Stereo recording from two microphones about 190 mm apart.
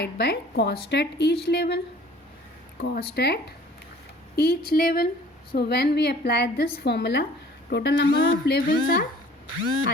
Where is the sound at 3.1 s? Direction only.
60° left (ahead or behind).